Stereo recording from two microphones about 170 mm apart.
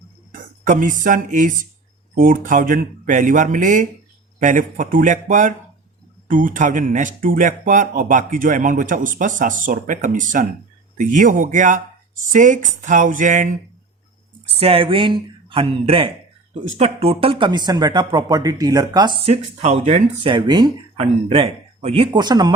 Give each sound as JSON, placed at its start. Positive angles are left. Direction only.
{"t": 0.3, "sound": "speech", "side_deg": -50}
{"t": 14.5, "sound": "speech", "side_deg": -35}
{"t": 20.3, "sound": "speech", "side_deg": -25}